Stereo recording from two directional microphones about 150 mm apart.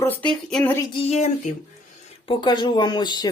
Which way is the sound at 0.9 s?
45° left (ahead or behind).